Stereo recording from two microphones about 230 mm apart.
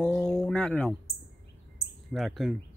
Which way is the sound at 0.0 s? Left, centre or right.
Centre.